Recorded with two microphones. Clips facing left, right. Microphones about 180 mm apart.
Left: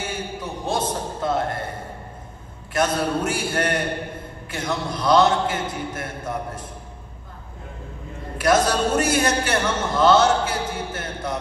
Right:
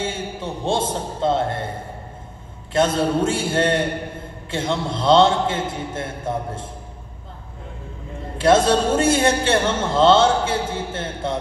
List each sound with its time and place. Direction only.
0.0 s a sound: 25° right (ahead or behind)
2.7 s a man's voice: 25° right (ahead or behind)
8.4 s a man's voice: 25° right (ahead or behind)